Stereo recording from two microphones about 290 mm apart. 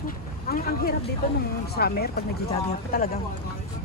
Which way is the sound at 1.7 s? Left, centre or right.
Left.